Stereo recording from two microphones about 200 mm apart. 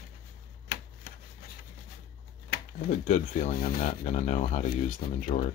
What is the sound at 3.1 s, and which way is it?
Speech, 40° left (ahead or behind).